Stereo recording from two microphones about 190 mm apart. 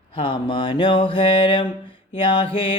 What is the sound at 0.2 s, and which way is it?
Mantra, 25° left (ahead or behind).